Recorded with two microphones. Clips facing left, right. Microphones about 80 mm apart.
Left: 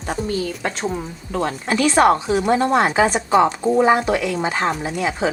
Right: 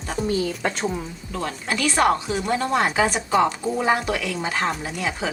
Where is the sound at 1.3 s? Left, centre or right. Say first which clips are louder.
Left 6 dB; left.